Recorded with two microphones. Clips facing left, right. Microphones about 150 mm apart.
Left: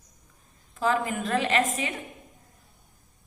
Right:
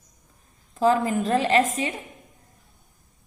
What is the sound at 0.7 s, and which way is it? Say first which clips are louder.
A woman's voice: right 5 dB; 40° right (ahead or behind).